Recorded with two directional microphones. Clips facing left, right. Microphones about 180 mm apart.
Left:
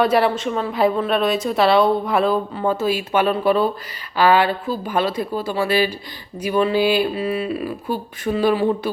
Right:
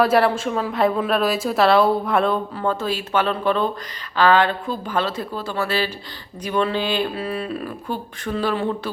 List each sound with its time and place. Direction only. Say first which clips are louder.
0.0 s a woman's voice: even; centre (ahead or behind)